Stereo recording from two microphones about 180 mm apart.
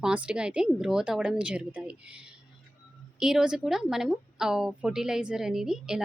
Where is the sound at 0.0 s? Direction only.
5° right (ahead or behind).